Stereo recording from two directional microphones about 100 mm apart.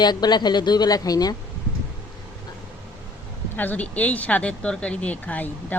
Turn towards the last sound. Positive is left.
turn(degrees=15)  # may be behind; listen again after turning